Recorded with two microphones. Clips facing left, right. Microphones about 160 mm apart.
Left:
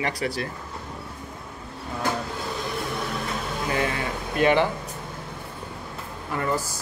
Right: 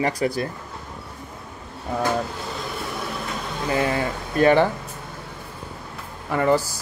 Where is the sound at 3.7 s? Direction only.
35° right (ahead or behind).